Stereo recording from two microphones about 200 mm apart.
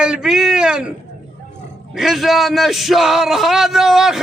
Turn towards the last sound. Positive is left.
turn(degrees=0)  # may be behind; listen again after turning